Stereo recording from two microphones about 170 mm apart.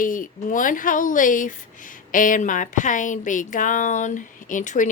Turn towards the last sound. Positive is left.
turn(degrees=50)  # may be behind; listen again after turning